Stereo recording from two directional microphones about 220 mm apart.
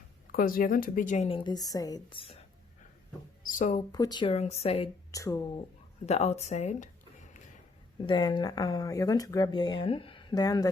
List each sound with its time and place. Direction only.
0.3 s speech: 40° left (ahead or behind)
3.9 s speech: 20° left (ahead or behind)
5.1 s speech: 15° left (ahead or behind)
6.1 s speech: 30° left (ahead or behind)
8.0 s speech: 20° left (ahead or behind)